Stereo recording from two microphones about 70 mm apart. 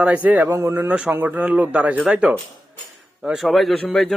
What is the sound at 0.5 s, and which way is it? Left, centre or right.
Speech, right.